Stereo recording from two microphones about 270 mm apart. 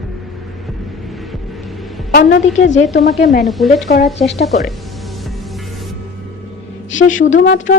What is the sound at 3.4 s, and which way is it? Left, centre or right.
Speech, centre.